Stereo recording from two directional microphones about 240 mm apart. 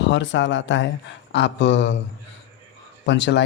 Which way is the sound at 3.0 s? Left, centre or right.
Left.